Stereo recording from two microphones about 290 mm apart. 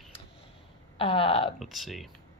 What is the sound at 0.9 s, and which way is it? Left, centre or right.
Speech, centre.